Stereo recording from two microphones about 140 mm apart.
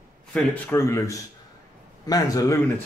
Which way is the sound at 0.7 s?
20° left (ahead or behind).